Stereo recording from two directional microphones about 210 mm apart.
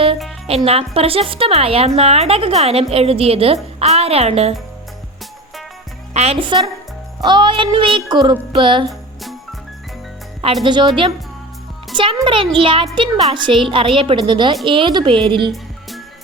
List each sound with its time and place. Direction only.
0.4 s speech: 30° right (ahead or behind)
6.1 s speech: 25° right (ahead or behind)
8.9 s music: centre (ahead or behind)
10.6 s speech: 20° right (ahead or behind)
11.9 s speech: 25° right (ahead or behind)